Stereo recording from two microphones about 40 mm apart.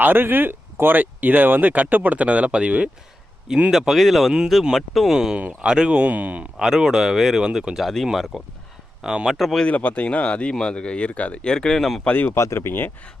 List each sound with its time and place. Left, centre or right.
0.0 s speech: right
3.7 s speech: centre
5.1 s speech: centre
6.0 s speech: right
6.6 s speech: centre
7.8 s speech: centre
9.0 s speech: centre
9.2 s speech: centre
9.6 s speech: left
11.4 s speech: centre
11.8 s speech: centre
12.0 s speech: left
12.3 s speech: left